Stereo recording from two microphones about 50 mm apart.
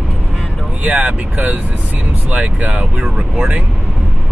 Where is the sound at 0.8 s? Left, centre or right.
Right.